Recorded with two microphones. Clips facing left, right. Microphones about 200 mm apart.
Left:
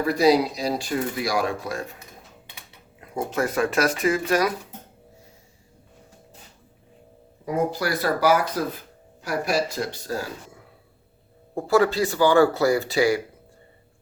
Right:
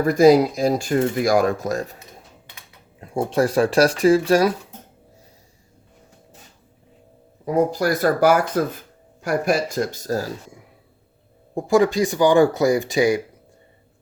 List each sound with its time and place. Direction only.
0.0 s speech: 45° right (ahead or behind)
3.0 s speech: 30° right (ahead or behind)
7.4 s speech: 40° right (ahead or behind)
11.5 s speech: 15° right (ahead or behind)